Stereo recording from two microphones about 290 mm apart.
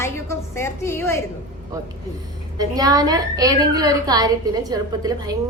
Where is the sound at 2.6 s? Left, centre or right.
Centre.